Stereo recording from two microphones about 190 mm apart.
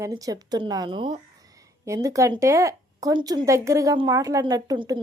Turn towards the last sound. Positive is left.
turn(degrees=-20)  # may be behind; listen again after turning